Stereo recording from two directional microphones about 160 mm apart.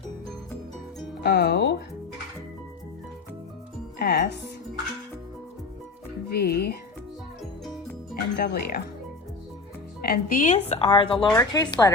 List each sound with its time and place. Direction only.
1.2 s speech: 85° left
3.9 s music: 70° left (ahead or behind)
6.3 s speech: 75° left (ahead or behind)
8.1 s speech: 75° left (ahead or behind)
10.0 s speech: 65° left (ahead or behind); by 11.9 s 25° left (ahead or behind)